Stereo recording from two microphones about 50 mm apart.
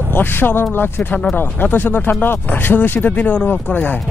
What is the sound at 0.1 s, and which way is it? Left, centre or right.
Speech, left.